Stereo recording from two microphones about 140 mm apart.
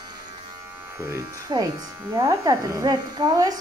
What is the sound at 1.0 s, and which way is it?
Speech, 25° right (ahead or behind).